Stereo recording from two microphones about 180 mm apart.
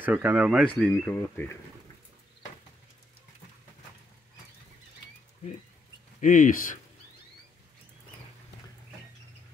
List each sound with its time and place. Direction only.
0.0 s speech: 10° right (ahead or behind)
0.7 s speech: 5° left (ahead or behind)
6.2 s speech: 45° left (ahead or behind)